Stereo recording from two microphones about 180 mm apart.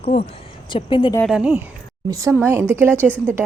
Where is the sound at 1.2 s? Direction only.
5° right (ahead or behind).